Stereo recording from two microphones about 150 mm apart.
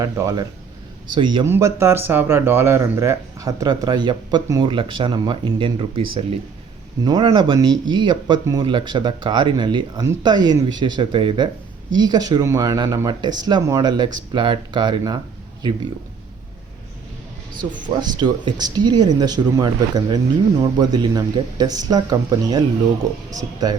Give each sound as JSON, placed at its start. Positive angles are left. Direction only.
{"t": 0.0, "sound": "speech", "side_deg": -25}
{"t": 1.5, "sound": "speech", "side_deg": -20}
{"t": 18.0, "sound": "speech", "side_deg": -30}